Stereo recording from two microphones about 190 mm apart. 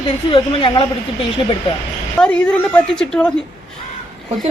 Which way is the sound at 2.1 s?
5° left (ahead or behind).